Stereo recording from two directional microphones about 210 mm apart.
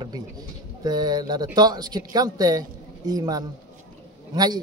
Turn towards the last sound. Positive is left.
turn(degrees=-20)  # may be behind; listen again after turning